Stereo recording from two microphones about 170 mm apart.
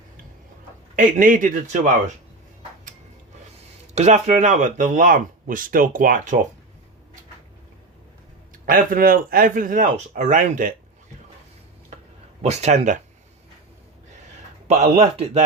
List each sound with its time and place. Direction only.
0.9 s speech: 50° right (ahead or behind)
3.9 s speech: 45° right (ahead or behind)
8.6 s speech: 55° right (ahead or behind)
12.4 s a man's voice: 40° right (ahead or behind)
14.7 s a man's voice: 40° right (ahead or behind)